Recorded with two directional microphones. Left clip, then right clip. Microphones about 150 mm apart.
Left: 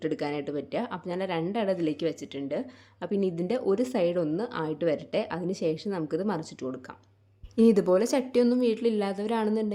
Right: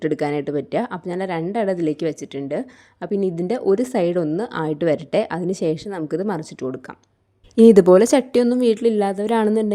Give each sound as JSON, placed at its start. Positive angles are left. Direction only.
{"t": 0.0, "sound": "a woman's voice", "side_deg": -50}